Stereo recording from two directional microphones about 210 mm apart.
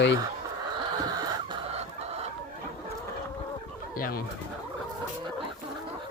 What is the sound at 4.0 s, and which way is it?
Speech, 45° left (ahead or behind).